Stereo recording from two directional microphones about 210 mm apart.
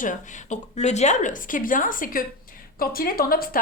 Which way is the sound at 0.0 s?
35° left (ahead or behind).